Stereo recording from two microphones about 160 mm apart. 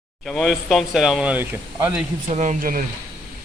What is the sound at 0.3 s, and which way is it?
Speech, centre (ahead or behind).